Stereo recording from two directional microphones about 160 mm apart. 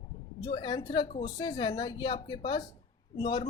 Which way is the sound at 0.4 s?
25° left (ahead or behind).